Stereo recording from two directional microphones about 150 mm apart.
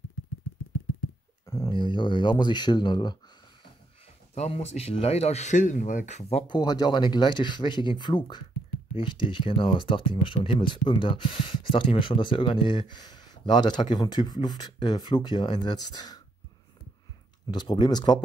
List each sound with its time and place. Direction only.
1.4 s a sound: 20° left (ahead or behind)
1.7 s speech: 30° left (ahead or behind)
4.4 s speech: 45° left (ahead or behind)
6.4 s speech: 25° left (ahead or behind)
17.5 s speech: 30° left (ahead or behind)